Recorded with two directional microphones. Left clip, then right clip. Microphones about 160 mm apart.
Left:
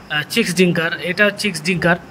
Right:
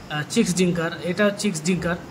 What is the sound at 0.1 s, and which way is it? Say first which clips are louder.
Speech: left 5 dB; 35° left (ahead or behind).